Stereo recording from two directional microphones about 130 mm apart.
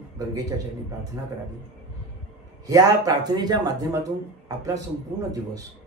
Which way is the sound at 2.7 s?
30° right (ahead or behind).